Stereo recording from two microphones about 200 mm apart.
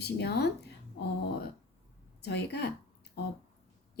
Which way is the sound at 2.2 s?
55° left (ahead or behind).